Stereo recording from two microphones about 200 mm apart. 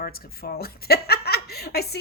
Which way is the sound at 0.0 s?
50° left (ahead or behind).